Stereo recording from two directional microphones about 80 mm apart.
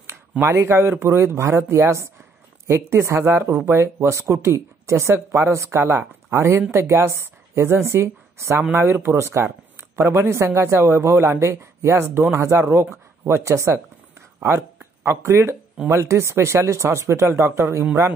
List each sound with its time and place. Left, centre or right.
0.5 s a woman's voice: right